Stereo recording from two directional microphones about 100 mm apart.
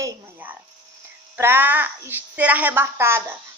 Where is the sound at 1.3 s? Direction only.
20° right (ahead or behind).